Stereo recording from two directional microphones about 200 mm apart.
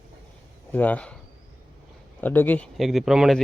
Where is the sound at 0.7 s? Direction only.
10° left (ahead or behind).